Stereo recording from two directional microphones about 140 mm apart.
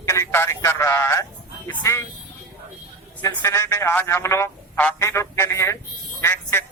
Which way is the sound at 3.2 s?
20° left (ahead or behind).